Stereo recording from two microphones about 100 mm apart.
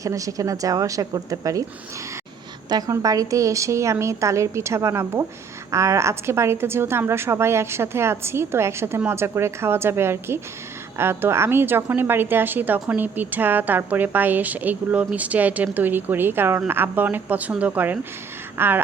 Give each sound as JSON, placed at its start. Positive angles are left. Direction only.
{"t": 0.0, "sound": "a woman's voice", "side_deg": -35}
{"t": 2.6, "sound": "a woman's voice", "side_deg": -40}
{"t": 18.5, "sound": "a sound", "side_deg": -20}